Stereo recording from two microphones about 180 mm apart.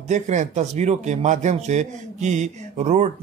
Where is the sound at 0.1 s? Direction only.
40° right (ahead or behind).